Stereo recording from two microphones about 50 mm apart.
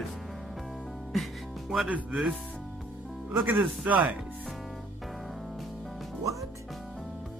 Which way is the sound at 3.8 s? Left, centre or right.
Right.